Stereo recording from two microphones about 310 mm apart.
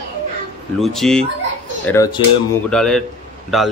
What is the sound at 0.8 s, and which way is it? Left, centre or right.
Speech, centre.